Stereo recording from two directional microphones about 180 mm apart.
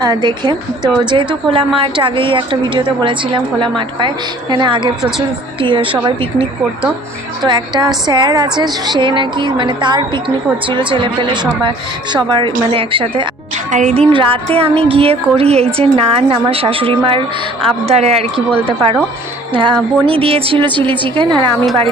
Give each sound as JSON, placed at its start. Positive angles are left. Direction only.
{"t": 0.0, "sound": "a woman's voice", "side_deg": -25}
{"t": 7.4, "sound": "a woman's voice", "side_deg": -25}
{"t": 13.7, "sound": "music", "side_deg": -40}
{"t": 19.5, "sound": "a woman's voice", "side_deg": -25}